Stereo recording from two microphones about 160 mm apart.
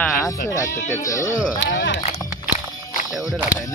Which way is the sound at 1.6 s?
90° left.